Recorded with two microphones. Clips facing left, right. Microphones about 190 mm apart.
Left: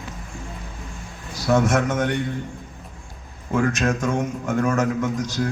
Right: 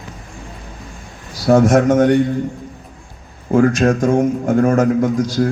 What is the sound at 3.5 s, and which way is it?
A man's voice, 35° right (ahead or behind).